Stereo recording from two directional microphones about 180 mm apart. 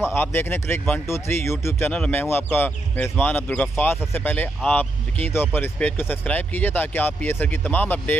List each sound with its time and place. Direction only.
0.1 s speech: 10° left (ahead or behind)